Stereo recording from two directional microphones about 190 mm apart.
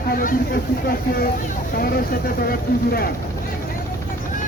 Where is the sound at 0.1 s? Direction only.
45° left (ahead or behind).